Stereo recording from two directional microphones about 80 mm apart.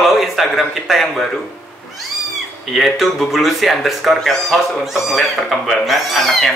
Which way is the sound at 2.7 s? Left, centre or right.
Centre.